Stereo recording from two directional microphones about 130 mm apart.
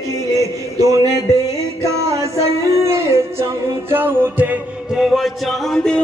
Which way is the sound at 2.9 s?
20° right (ahead or behind).